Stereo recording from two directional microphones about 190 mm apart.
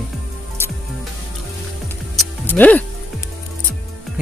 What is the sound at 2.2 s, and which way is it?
Music, 10° left (ahead or behind).